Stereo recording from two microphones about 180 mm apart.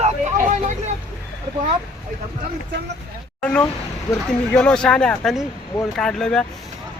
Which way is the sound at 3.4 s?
5° left (ahead or behind).